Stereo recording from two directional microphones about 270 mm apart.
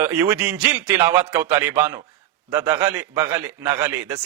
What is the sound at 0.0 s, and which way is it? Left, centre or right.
A man's voice, centre.